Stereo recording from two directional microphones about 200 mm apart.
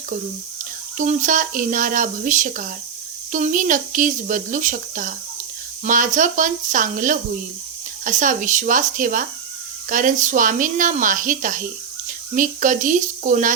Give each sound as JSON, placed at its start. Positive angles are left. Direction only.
{"t": 0.9, "sound": "speech", "side_deg": -40}